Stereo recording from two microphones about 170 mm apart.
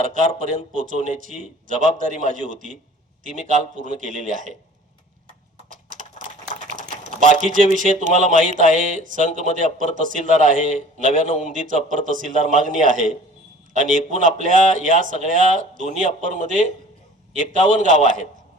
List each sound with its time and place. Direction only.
0.0 s speech: 50° right (ahead or behind)
5.6 s a sound: 50° right (ahead or behind)
6.5 s typing: 50° right (ahead or behind)
7.9 s speech: 50° right (ahead or behind)